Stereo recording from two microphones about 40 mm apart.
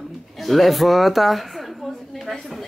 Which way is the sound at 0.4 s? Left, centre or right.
Centre.